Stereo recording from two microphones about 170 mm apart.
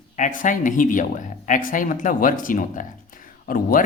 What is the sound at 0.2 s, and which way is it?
Speech, 50° left (ahead or behind).